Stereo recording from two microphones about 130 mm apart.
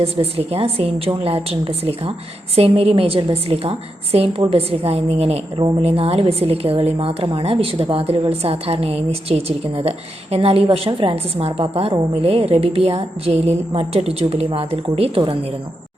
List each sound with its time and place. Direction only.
0.0 s a woman's voice: 50° right (ahead or behind)